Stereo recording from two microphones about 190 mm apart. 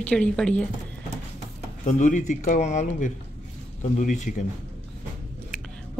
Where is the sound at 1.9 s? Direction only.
40° left (ahead or behind).